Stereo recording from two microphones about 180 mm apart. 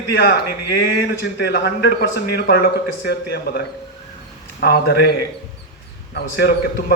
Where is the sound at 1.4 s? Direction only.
65° left (ahead or behind).